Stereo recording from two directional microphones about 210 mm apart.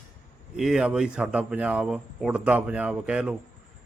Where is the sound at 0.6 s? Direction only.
5° right (ahead or behind).